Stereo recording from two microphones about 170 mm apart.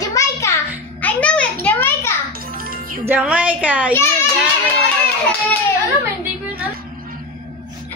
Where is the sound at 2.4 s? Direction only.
60° right (ahead or behind).